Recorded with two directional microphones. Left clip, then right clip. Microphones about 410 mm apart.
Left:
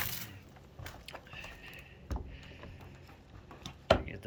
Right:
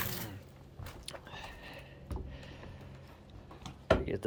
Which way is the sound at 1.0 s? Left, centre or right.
Centre.